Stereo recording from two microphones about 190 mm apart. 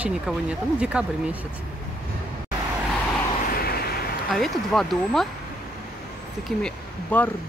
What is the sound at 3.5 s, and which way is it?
Vehicle, 55° left (ahead or behind).